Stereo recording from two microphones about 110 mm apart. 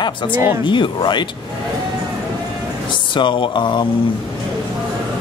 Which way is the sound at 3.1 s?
50° left (ahead or behind).